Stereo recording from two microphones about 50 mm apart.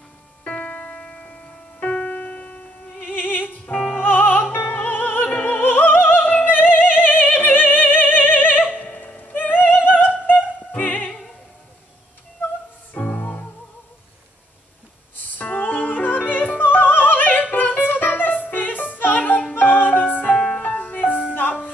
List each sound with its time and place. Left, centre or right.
0.5 s music: left
3.0 s music: left
4.0 s opera: left
6.9 s music: left
8.7 s opera: left
12.9 s music: left
15.3 s music: left
20.2 s music: centre
20.6 s music: left